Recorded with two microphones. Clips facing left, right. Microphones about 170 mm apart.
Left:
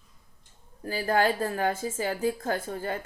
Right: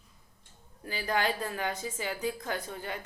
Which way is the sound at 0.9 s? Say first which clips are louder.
Left 6 dB; 45° left (ahead or behind).